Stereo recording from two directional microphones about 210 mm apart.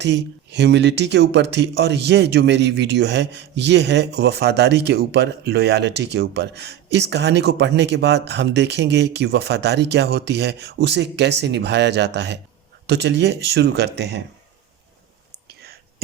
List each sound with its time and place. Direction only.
0.0 s speech: 55° right (ahead or behind)
15.4 s whispering: 50° right (ahead or behind)